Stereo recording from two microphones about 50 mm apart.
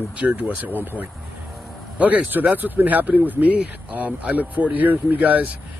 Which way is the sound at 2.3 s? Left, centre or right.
Right.